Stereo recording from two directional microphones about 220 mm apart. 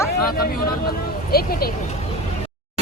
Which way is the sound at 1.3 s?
45° left (ahead or behind).